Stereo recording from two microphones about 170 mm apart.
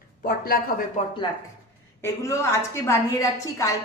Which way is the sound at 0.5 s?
60° left (ahead or behind).